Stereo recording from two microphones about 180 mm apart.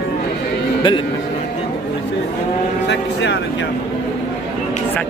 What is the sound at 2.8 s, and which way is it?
Vehicle, 75° left (ahead or behind).